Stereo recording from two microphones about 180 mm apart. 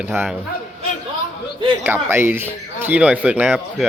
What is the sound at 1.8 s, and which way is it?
Speech, 10° right (ahead or behind).